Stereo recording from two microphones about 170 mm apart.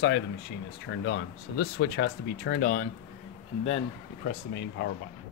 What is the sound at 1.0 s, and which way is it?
Speech, 90° left.